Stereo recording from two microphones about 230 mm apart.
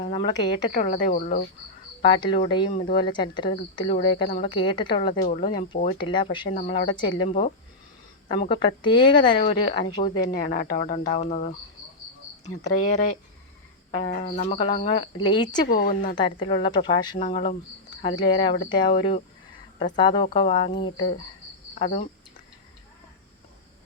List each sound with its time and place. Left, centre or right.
0.0 s speech: left
0.7 s a woman's voice: left
2.0 s speech: left
5.2 s speech: left
6.5 s a woman's voice: left
12.8 s a woman's voice: left
14.1 s speech: left
15.6 s a woman's voice: left
16.1 s speech: centre